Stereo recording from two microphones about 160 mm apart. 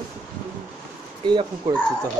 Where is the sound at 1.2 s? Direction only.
30° right (ahead or behind).